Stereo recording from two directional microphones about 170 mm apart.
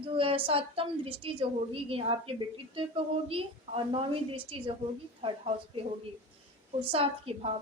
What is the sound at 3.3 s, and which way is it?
A woman's voice, 35° right (ahead or behind).